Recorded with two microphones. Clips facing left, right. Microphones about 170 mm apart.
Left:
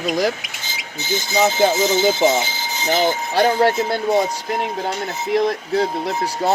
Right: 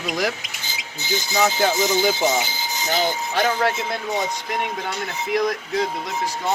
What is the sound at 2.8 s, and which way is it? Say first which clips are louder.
Speech: left 4 dB; 45° left (ahead or behind).